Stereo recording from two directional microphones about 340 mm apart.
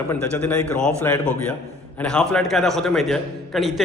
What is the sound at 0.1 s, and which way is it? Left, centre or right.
A man's voice, centre.